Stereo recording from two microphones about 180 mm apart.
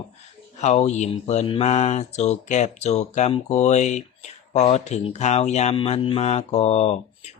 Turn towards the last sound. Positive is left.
turn(degrees=35)  # may be behind; listen again after turning